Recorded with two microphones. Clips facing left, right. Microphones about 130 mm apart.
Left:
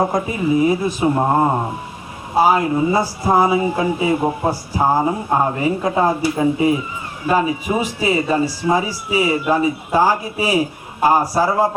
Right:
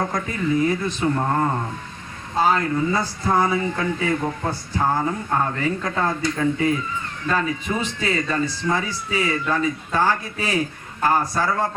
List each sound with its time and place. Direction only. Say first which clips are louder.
0.0 s speech: left 7 dB; 25° left (ahead or behind)
0.3 s speech: left 5 dB; 15° left (ahead or behind)
1.1 s speech: left 7 dB; 25° left (ahead or behind)
2.3 s speech: left 5 dB; 10° left (ahead or behind)
4.8 s a sound: left 5 dB; 35° left (ahead or behind)
5.0 s speech: left 5 dB; 25° left (ahead or behind)
11.4 s speech: left 6 dB; 30° left (ahead or behind)